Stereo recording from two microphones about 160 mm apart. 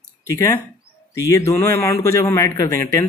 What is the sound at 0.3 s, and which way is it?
A man's voice, 20° left (ahead or behind).